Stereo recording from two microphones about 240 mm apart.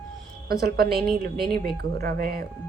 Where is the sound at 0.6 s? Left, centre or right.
Right.